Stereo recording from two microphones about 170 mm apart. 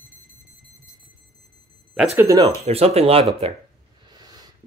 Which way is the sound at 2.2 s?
20° right (ahead or behind).